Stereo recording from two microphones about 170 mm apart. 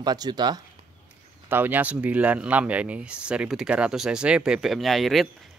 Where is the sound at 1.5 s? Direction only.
10° right (ahead or behind).